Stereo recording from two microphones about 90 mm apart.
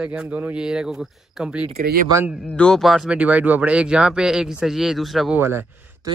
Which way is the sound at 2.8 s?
5° right (ahead or behind).